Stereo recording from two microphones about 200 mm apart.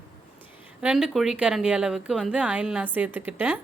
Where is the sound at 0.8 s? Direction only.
5° right (ahead or behind).